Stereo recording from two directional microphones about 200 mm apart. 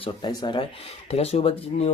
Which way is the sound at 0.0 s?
20° left (ahead or behind).